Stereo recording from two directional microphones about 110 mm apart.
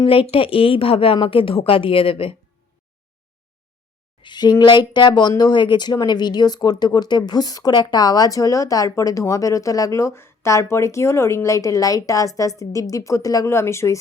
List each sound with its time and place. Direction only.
0.0 s a woman's voice: 55° left (ahead or behind)
4.2 s speech: 40° left (ahead or behind); by 14.0 s 25° left (ahead or behind)